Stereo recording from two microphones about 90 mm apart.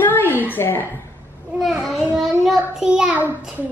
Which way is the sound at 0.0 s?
20° left (ahead or behind).